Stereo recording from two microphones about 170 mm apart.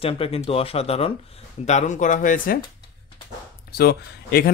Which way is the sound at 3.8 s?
65° left (ahead or behind).